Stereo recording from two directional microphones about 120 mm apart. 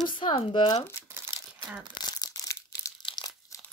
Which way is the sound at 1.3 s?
35° left (ahead or behind).